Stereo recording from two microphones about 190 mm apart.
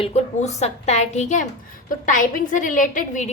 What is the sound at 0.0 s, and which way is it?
A woman's voice, 35° left (ahead or behind).